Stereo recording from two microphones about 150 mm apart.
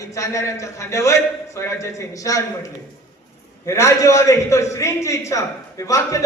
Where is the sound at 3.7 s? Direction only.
20° left (ahead or behind).